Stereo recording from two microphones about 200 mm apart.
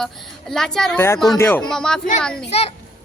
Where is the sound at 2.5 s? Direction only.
30° left (ahead or behind).